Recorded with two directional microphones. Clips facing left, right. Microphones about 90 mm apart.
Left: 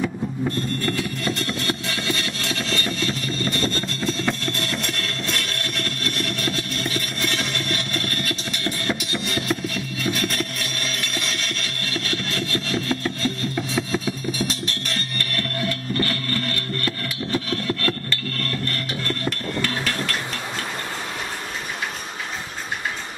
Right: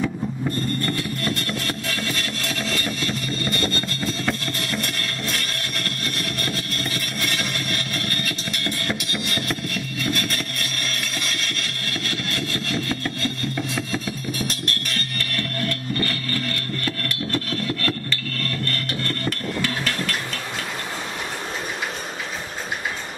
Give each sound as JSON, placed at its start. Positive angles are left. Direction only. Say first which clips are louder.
{"t": 0.8, "sound": "music", "louder": "left 1 dB", "side_deg": 0}
{"t": 18.7, "sound": "music", "louder": "even", "side_deg": 0}